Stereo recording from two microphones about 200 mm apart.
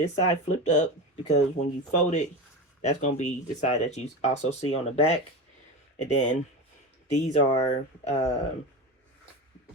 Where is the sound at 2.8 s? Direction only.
35° left (ahead or behind).